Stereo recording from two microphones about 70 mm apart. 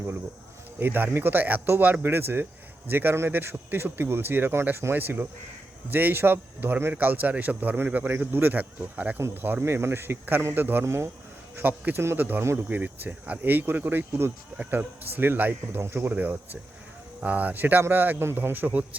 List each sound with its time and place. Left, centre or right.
0.8 s speech: right
10.8 s speech: right
11.5 s speech: right
16.1 s speech: right